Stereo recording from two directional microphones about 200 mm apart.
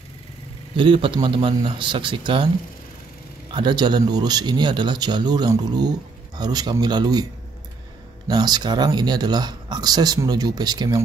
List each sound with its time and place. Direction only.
0.7 s speech: 25° right (ahead or behind)
3.5 s speech: 25° right (ahead or behind)
8.3 s speech: 20° right (ahead or behind)